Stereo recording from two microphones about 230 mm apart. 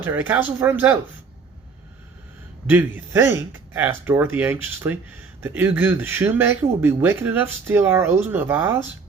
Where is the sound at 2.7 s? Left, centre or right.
Centre.